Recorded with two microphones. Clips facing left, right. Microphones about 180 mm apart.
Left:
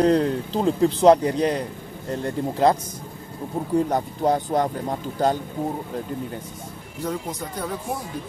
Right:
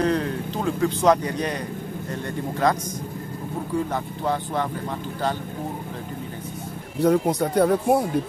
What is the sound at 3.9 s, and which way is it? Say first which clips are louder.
Speech: left 4 dB; 40° left (ahead or behind).